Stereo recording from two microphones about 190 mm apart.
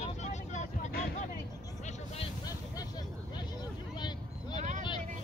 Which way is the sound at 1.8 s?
30° left (ahead or behind).